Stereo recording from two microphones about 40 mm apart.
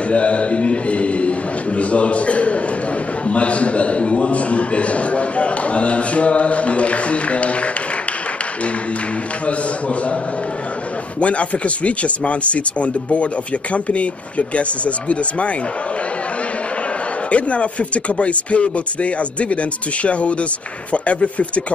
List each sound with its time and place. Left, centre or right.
0.1 s a sound: left
3.3 s a man's voice: left
9.5 s speech: left
11.1 s speech: left
17.3 s speech: left